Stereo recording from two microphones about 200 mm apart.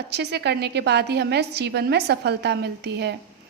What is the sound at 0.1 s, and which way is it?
A woman's voice, 55° right (ahead or behind).